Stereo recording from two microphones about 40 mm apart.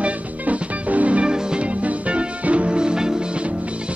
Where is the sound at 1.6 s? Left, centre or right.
Right.